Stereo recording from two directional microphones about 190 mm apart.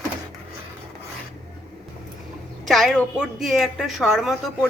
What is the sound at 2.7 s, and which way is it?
A woman's voice, centre (ahead or behind).